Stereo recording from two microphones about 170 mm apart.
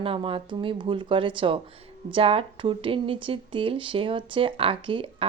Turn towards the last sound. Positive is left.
turn(degrees=-30)  # may be behind; listen again after turning